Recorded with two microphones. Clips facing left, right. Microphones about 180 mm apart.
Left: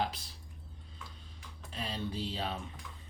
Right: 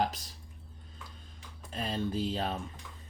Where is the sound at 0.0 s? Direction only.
45° right (ahead or behind).